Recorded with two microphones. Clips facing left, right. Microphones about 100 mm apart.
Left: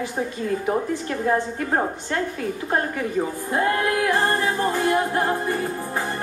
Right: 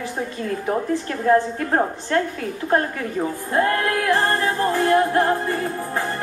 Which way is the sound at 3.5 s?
15° left (ahead or behind).